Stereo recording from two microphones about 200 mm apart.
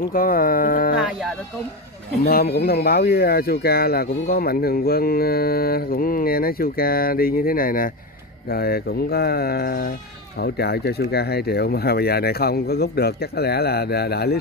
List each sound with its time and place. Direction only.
0.1 s speech: 45° left (ahead or behind)
0.9 s speech: centre (ahead or behind)
2.2 s speech: 50° left (ahead or behind)